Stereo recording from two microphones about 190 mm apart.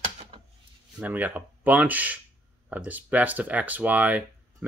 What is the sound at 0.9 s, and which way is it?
Speech, 10° right (ahead or behind).